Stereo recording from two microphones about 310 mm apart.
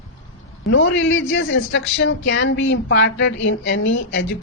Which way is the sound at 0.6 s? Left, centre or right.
Left.